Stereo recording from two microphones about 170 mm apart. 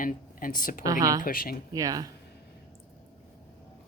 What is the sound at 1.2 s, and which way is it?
Speech, 60° left (ahead or behind).